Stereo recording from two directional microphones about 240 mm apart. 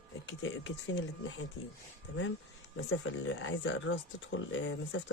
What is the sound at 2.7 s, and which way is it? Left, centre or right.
Speech, left.